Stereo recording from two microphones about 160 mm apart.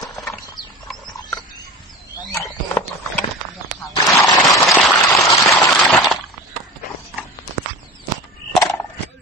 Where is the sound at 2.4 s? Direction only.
15° left (ahead or behind).